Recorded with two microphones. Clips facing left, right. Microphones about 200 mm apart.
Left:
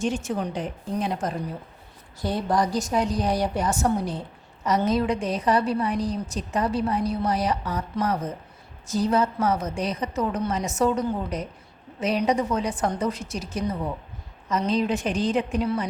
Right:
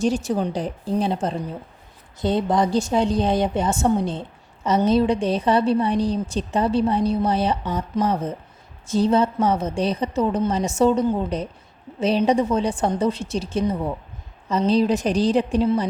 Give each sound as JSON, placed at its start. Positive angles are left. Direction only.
{"t": 0.0, "sound": "a woman's voice", "side_deg": -35}